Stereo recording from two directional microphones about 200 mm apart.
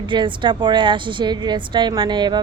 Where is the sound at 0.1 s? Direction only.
25° right (ahead or behind).